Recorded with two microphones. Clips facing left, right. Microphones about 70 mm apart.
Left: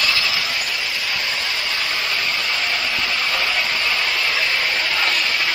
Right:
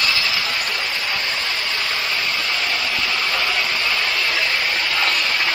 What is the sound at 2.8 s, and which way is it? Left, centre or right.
Vehicle, centre.